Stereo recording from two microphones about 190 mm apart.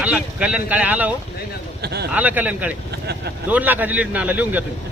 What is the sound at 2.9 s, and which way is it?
Speech, 60° right (ahead or behind).